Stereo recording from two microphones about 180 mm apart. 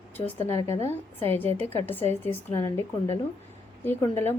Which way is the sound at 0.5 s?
20° left (ahead or behind).